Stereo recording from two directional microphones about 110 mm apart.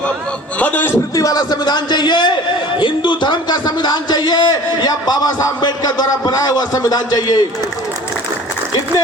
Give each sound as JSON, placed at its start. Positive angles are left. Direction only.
{"t": 0.6, "sound": "a man's voice", "side_deg": 15}
{"t": 1.1, "sound": "a man's voice", "side_deg": 35}